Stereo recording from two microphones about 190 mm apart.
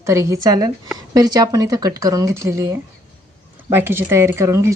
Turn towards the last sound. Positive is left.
turn(degrees=-15)  # may be behind; listen again after turning